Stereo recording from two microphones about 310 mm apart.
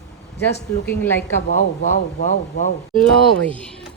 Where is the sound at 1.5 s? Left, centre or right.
Left.